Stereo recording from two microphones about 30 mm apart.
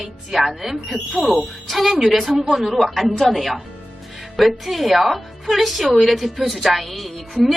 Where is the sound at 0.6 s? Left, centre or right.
Centre.